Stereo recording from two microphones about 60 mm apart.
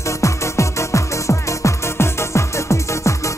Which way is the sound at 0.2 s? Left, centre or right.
Left.